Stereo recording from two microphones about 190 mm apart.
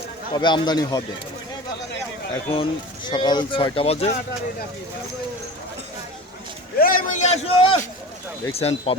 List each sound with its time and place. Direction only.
0.3 s speech: 25° left (ahead or behind)
2.5 s speech: 25° left (ahead or behind)
6.7 s a man's voice: 50° left (ahead or behind); by 9.0 s 30° left (ahead or behind)